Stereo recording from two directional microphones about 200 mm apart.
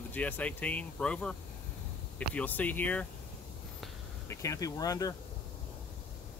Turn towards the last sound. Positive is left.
turn(degrees=20)  # may be behind; listen again after turning